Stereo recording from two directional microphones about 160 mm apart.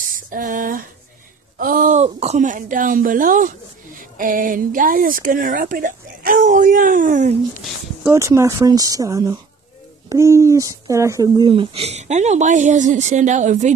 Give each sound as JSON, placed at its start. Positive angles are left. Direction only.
{"t": 0.1, "sound": "speech", "side_deg": -60}
{"t": 8.0, "sound": "a woman's voice", "side_deg": -15}